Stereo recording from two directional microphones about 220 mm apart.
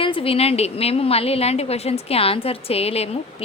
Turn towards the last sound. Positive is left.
turn(degrees=25)  # may be behind; listen again after turning